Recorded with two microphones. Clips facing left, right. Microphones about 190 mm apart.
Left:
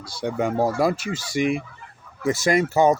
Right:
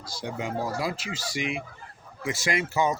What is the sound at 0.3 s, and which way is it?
Speech, 55° left (ahead or behind).